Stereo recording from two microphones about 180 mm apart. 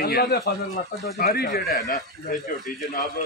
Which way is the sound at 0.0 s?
60° left (ahead or behind).